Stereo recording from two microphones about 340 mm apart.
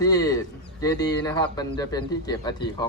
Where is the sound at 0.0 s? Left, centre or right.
Centre.